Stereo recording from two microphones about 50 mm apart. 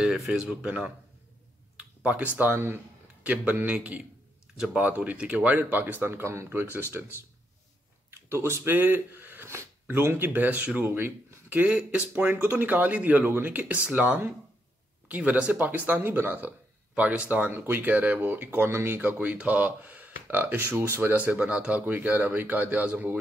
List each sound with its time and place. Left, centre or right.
0.3 s speech: centre
3.6 s speech: right
5.5 s speech: right
6.0 s speech: right
7.0 s speech: centre
8.1 s speech: right
8.7 s speech: right
11.4 s speech: right
17.5 s speech: right
18.9 s speech: right
21.3 s speech: right
21.8 s speech: right